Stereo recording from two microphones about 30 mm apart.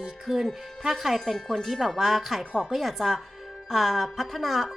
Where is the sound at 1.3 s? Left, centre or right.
Centre.